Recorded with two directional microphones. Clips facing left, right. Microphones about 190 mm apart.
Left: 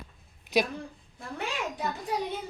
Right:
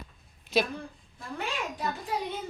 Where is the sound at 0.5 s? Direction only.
15° left (ahead or behind).